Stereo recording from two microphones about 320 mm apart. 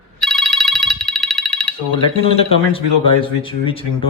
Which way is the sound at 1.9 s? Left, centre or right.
Centre.